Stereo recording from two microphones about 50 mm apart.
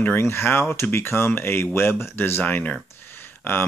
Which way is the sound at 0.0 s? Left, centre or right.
Left.